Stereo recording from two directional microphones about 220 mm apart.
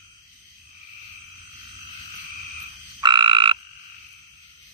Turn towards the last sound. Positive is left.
turn(degrees=-20)  # may be behind; listen again after turning